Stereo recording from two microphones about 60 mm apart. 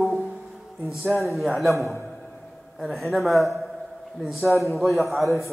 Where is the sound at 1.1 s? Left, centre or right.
Centre.